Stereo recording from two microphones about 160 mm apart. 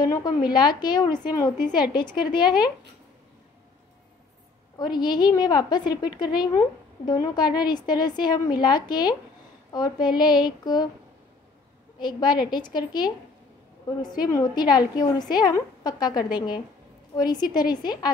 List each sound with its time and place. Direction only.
0.0 s a woman's voice: 25° left (ahead or behind)
4.7 s a woman's voice: 25° left (ahead or behind)
12.0 s a woman's voice: 30° left (ahead or behind)